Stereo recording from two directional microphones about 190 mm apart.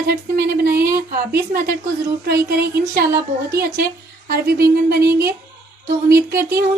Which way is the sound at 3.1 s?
15° right (ahead or behind).